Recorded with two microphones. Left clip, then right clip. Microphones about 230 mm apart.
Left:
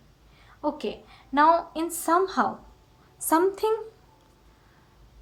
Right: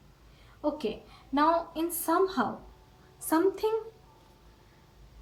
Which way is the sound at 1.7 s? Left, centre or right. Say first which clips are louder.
Left 3 dB; left.